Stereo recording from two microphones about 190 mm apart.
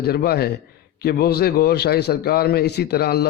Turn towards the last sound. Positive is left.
turn(degrees=55)  # may be behind; listen again after turning